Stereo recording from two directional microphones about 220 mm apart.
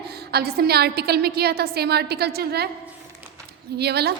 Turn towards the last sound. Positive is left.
turn(degrees=-50)  # may be behind; listen again after turning